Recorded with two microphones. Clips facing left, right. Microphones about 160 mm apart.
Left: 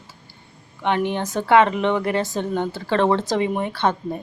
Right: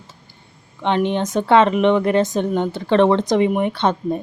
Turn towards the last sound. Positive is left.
turn(degrees=-20)  # may be behind; listen again after turning